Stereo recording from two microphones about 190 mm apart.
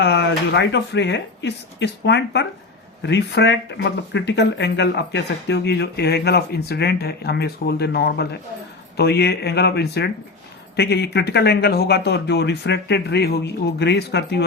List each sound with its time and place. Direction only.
0.0 s speech: 65° left (ahead or behind)